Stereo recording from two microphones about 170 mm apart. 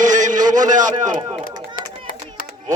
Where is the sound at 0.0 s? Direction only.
50° right (ahead or behind).